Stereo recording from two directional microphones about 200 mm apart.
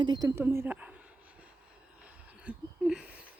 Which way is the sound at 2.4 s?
5° right (ahead or behind).